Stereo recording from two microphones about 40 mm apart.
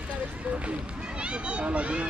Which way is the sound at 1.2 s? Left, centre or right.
Right.